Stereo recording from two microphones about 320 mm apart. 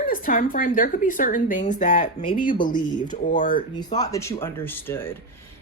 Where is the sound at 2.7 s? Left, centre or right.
Centre.